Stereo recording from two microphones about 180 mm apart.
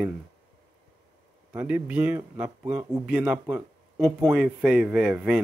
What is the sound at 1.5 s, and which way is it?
Speech, 10° right (ahead or behind).